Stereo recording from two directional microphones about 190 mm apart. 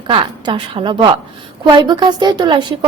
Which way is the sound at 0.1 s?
25° right (ahead or behind).